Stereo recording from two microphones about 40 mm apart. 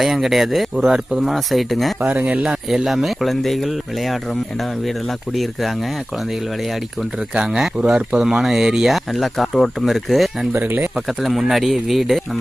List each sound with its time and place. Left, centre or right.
0.0 s speech: centre
0.9 s speech: centre
1.3 s speech: centre
2.0 s speech: right
2.5 s speech: centre
5.3 s speech: centre
7.3 s speech: right
8.2 s speech: centre
8.9 s speech: centre